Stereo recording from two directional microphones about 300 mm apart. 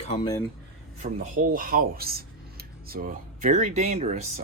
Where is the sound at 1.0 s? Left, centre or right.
Right.